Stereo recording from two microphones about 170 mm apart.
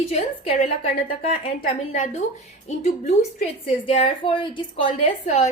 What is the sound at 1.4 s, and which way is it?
Speech, 40° left (ahead or behind).